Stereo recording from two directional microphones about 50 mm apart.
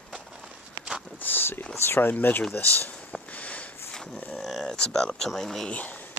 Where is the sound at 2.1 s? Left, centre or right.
Left.